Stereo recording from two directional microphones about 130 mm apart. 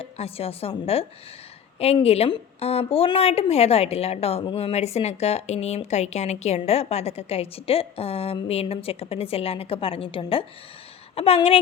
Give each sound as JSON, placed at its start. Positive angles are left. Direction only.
{"t": 0.0, "sound": "speech", "side_deg": 50}